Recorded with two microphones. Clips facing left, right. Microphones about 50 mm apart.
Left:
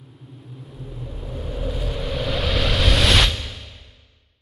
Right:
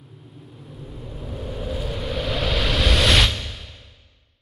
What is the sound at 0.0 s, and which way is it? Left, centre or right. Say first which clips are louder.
Vehicle: left 1 dB; centre.